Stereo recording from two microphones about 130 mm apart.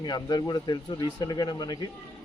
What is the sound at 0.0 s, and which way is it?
A man's voice, 35° left (ahead or behind).